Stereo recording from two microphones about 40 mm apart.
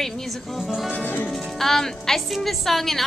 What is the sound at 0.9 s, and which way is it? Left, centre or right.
Music, left.